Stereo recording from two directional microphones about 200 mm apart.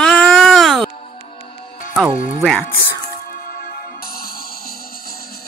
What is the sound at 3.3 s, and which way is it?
Music, 45° left (ahead or behind).